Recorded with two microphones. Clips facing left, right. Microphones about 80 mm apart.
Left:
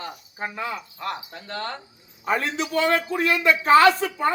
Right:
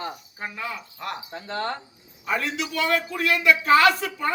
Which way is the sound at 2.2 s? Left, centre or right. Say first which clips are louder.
Left 2 dB; left.